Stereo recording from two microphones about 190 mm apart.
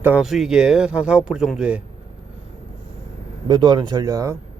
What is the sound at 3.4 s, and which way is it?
Speech, 25° right (ahead or behind).